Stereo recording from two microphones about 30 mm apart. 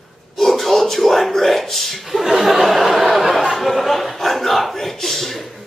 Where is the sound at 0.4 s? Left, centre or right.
Centre.